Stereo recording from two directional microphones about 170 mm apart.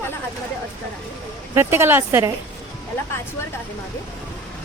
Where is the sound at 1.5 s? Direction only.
15° right (ahead or behind).